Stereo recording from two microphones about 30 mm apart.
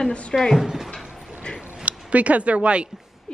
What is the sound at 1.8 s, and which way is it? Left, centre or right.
Speech, right.